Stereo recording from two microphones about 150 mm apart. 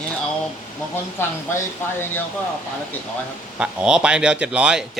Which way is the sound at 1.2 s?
15° left (ahead or behind).